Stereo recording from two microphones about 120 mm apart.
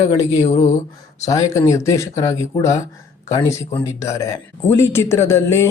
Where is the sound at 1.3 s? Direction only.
25° left (ahead or behind).